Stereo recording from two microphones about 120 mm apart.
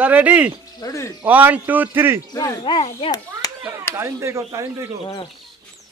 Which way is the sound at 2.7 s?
45° left (ahead or behind).